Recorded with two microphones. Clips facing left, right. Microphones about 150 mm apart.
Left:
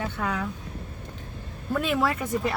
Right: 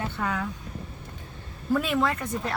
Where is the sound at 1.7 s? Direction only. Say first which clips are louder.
Even; centre (ahead or behind).